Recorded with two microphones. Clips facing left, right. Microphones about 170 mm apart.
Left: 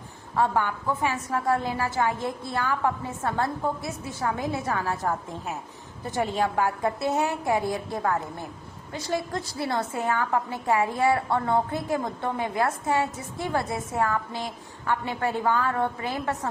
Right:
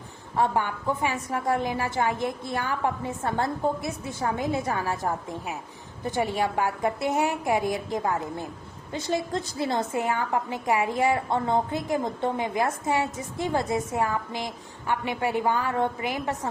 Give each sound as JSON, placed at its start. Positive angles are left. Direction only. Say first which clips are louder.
{"t": 0.3, "sound": "a woman's voice", "louder": "even", "side_deg": -20}